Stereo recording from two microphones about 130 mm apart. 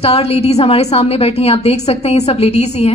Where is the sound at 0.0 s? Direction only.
50° left (ahead or behind).